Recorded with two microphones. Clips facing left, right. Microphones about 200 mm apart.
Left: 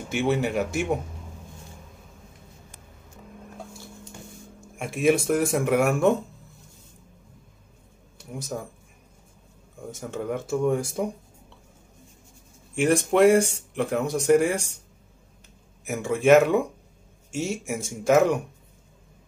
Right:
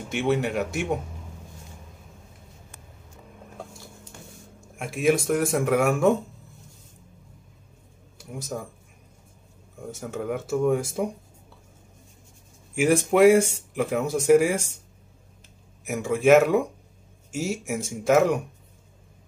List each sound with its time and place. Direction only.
0.1 s speech: centre (ahead or behind)
3.7 s a sound: centre (ahead or behind)
4.7 s speech: centre (ahead or behind)
8.2 s speech: centre (ahead or behind)
9.8 s speech: 5° right (ahead or behind)
12.7 s speech: 5° right (ahead or behind)
15.8 s speech: centre (ahead or behind)